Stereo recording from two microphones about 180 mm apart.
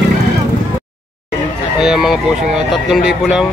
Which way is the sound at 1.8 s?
Centre (ahead or behind).